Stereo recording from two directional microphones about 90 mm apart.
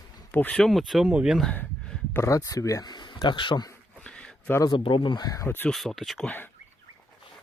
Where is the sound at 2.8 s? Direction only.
55° left (ahead or behind).